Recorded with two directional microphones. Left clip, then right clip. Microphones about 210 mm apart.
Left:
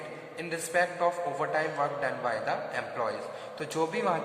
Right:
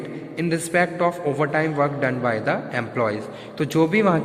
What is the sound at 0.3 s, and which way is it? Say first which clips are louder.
A man's voice: right 8 dB; 45° right (ahead or behind).